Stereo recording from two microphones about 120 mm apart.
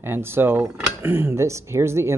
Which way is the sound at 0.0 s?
20° right (ahead or behind).